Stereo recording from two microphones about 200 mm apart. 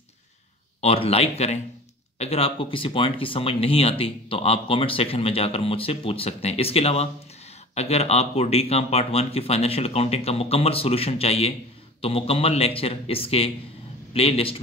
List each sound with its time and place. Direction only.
0.7 s speech: 30° left (ahead or behind)